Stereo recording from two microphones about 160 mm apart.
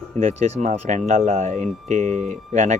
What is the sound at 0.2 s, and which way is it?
Speech, 45° right (ahead or behind).